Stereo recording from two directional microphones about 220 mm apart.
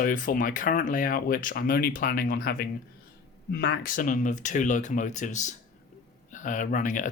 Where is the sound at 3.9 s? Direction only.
35° left (ahead or behind).